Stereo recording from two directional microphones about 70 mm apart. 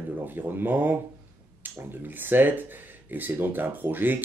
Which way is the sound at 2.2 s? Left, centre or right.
Right.